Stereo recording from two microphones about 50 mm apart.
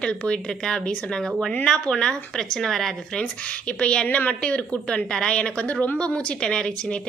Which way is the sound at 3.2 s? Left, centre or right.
Left.